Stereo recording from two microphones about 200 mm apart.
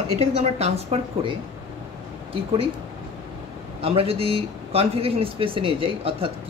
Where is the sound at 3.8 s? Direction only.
30° right (ahead or behind).